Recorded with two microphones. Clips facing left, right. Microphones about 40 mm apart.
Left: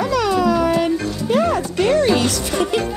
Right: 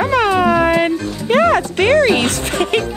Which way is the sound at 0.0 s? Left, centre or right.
Right.